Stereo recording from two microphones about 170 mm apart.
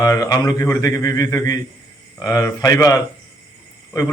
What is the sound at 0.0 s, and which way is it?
A man's voice, 20° left (ahead or behind).